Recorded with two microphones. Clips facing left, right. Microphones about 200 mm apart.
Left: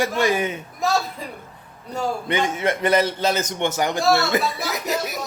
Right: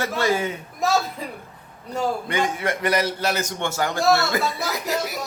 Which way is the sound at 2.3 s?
20° left (ahead or behind).